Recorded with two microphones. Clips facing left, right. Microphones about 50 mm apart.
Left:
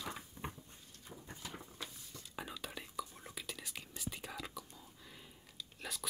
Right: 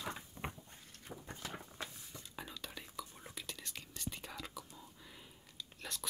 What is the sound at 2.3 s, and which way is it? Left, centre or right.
Whispering, centre.